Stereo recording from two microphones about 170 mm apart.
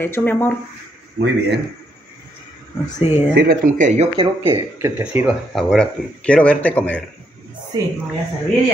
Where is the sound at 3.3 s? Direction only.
55° right (ahead or behind).